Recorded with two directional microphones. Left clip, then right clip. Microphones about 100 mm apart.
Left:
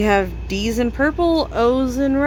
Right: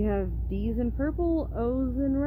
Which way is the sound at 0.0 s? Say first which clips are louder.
Left 13 dB; 45° left (ahead or behind).